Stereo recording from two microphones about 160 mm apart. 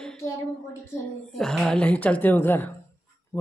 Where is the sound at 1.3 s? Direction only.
Centre (ahead or behind).